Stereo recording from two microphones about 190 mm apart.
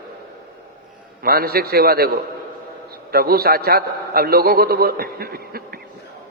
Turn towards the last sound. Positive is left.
turn(degrees=-50)  # may be behind; listen again after turning